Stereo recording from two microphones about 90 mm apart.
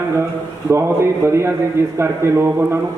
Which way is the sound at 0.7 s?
30° right (ahead or behind).